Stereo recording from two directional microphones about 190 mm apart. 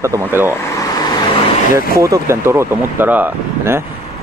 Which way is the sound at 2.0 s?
15° right (ahead or behind).